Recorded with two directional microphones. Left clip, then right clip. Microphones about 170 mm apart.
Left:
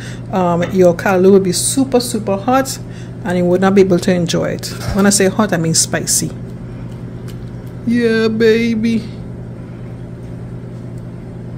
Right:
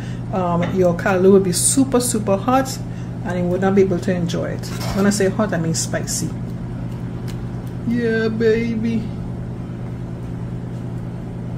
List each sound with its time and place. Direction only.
0.3 s a woman's voice: 40° left (ahead or behind)
3.3 s speech: 45° left (ahead or behind)
7.9 s speech: 45° left (ahead or behind)